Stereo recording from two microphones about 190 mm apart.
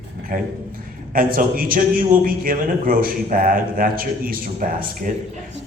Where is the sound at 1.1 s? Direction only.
50° right (ahead or behind).